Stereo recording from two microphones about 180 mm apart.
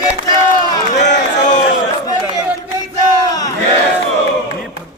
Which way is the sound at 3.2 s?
20° left (ahead or behind).